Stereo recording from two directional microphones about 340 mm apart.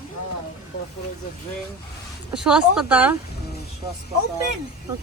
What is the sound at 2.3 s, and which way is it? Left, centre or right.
Speech, centre.